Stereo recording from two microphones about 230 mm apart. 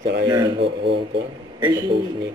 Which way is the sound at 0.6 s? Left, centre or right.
Right.